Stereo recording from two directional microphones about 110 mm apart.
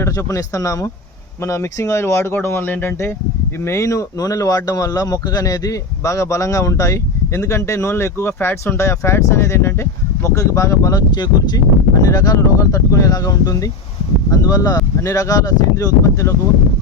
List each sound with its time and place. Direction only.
0.0 s speech: 30° left (ahead or behind)